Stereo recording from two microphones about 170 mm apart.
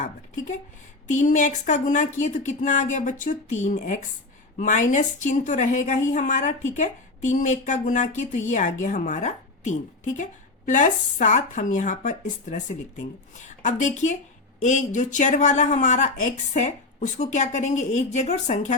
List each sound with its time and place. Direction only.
1.0 s speech: 45° left (ahead or behind)